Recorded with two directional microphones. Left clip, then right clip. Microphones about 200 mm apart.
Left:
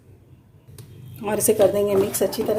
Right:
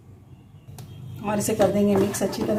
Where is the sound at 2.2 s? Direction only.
55° left (ahead or behind).